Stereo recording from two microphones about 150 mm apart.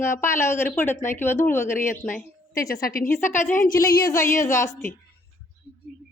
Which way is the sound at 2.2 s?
20° left (ahead or behind).